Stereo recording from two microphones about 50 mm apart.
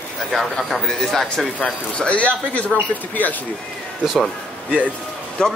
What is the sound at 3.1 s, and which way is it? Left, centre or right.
Speech, left.